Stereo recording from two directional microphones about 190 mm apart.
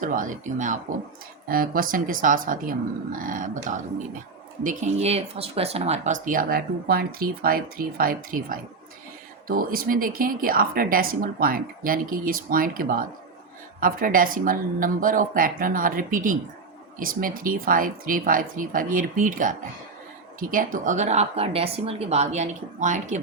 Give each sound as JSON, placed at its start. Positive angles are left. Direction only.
{"t": 0.0, "sound": "speech", "side_deg": -45}